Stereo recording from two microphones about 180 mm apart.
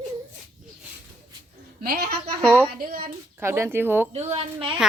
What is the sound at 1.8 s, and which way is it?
A woman's voice, 60° right (ahead or behind).